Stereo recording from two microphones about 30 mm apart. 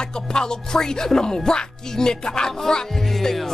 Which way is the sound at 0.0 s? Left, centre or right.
Left.